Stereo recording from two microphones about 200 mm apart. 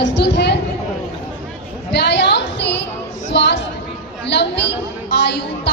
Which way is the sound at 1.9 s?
55° left (ahead or behind).